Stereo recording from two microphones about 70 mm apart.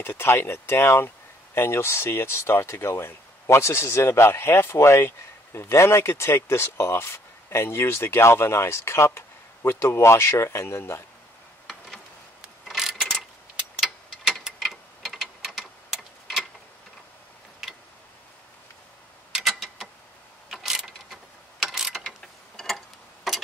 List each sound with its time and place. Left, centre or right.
0.0 s speech: left
12.6 s mechanisms: centre
13.7 s clock: centre
14.4 s tick-tock: centre
19.3 s a sound: centre
20.4 s mechanisms: centre
22.6 s tick-tock: centre
23.3 s clock: centre